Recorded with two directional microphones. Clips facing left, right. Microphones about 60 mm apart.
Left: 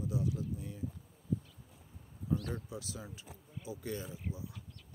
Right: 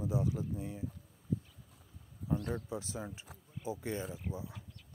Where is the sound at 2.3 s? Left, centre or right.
Right.